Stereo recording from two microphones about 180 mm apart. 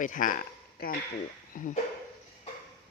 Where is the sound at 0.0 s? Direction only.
45° left (ahead or behind).